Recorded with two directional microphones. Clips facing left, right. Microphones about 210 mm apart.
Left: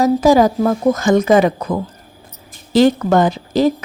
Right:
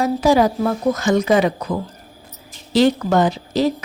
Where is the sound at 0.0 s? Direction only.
45° left (ahead or behind).